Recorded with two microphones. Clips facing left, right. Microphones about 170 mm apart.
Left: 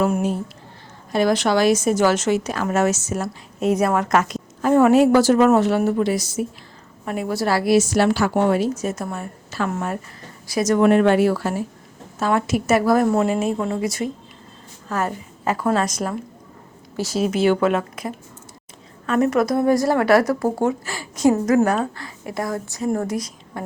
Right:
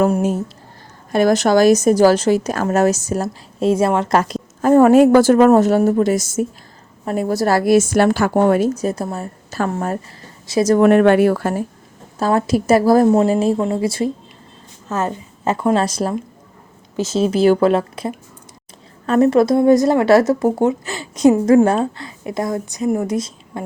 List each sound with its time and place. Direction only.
0.0 s a woman's voice: 45° right (ahead or behind)
8.7 s a woman's voice: 35° right (ahead or behind)
10.8 s a woman's voice: 55° right (ahead or behind)
12.2 s a woman's voice: 35° right (ahead or behind)